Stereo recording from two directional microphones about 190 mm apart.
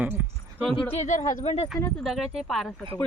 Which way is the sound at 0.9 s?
40° left (ahead or behind).